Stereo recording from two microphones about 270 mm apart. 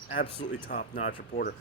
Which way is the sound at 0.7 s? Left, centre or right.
Left.